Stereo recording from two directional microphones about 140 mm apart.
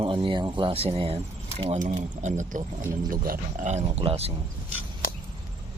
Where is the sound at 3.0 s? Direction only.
90° right; by 3.8 s 60° right (ahead or behind).